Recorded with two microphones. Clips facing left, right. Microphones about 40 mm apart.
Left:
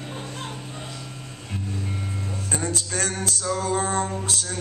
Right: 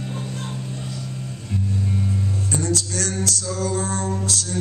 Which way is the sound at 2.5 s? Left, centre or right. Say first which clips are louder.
Right 2 dB; left.